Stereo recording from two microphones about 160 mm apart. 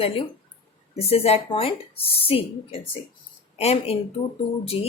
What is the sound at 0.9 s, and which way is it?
Speech, 40° left (ahead or behind).